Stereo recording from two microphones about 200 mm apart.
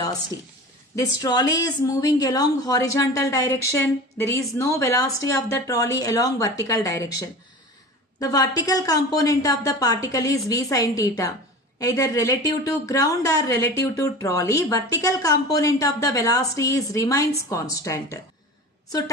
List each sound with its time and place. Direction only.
0.9 s speech: 20° left (ahead or behind)